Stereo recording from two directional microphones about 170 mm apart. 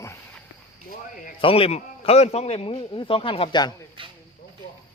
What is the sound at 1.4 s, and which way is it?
A man's voice, 35° left (ahead or behind).